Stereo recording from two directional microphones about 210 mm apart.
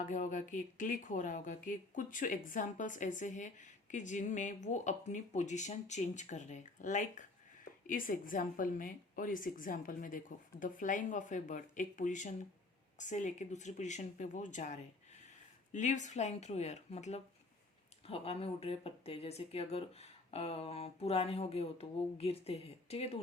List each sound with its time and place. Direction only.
0.0 s speech: 35° left (ahead or behind)